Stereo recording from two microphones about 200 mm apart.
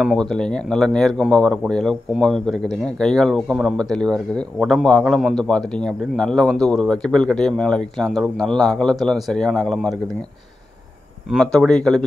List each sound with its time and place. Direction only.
0.0 s speech: centre (ahead or behind)
11.2 s speech: 5° left (ahead or behind)